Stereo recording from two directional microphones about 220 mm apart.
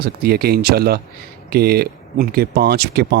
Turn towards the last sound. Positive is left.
turn(degrees=-50)  # may be behind; listen again after turning